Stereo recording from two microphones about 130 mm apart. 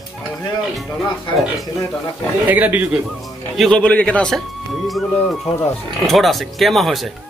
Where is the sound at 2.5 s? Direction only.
10° right (ahead or behind).